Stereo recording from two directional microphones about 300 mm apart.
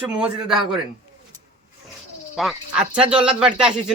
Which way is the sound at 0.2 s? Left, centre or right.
Centre.